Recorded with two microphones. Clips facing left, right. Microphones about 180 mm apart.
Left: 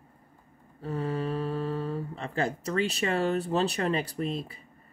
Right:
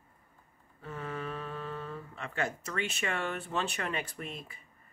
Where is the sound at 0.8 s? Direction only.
35° left (ahead or behind).